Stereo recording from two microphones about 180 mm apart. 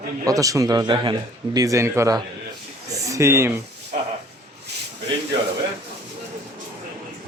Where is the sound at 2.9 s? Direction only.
15° right (ahead or behind).